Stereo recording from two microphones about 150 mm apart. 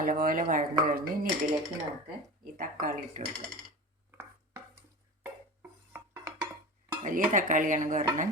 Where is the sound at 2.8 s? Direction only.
60° right (ahead or behind).